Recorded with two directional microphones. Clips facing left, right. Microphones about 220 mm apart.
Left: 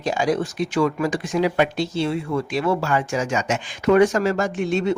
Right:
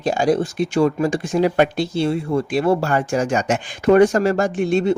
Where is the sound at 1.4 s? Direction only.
50° right (ahead or behind).